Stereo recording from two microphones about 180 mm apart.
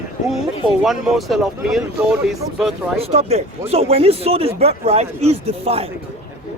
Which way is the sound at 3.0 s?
35° right (ahead or behind).